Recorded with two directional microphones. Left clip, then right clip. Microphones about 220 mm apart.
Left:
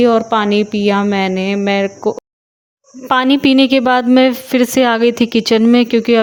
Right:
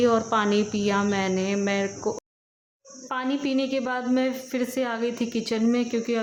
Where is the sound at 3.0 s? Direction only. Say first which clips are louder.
Left 16 dB; 45° left (ahead or behind).